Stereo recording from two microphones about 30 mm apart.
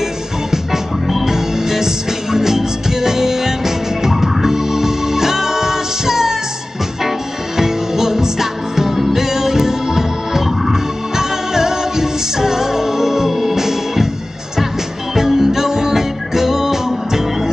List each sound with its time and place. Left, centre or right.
1.2 s music: centre
7.5 s music: centre
15.1 s music: centre